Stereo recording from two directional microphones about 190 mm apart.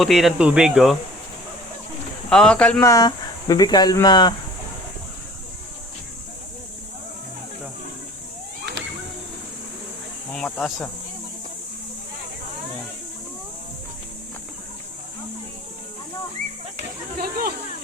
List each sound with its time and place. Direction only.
0.0 s speech: centre (ahead or behind)
2.3 s speech: 5° left (ahead or behind)
2.9 s speech: 20° left (ahead or behind)
10.3 s speech: 5° left (ahead or behind)
17.2 s a sound: 50° right (ahead or behind)